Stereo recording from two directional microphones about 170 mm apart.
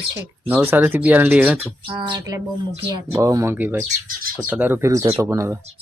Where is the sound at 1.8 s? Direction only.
30° right (ahead or behind).